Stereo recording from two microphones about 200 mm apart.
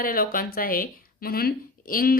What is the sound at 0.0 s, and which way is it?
A woman's voice, 45° left (ahead or behind).